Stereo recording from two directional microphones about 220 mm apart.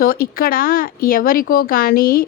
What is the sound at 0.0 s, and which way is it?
A woman's voice, 45° left (ahead or behind).